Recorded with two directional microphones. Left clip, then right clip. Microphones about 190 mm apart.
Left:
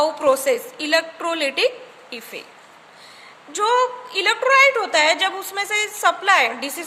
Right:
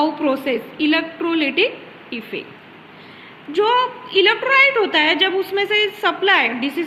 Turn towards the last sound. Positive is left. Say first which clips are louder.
# right 1 dB
turn(degrees=60)  # may be behind; listen again after turning